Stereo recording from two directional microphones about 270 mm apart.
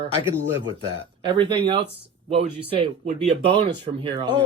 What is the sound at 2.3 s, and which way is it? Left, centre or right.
Speech, right.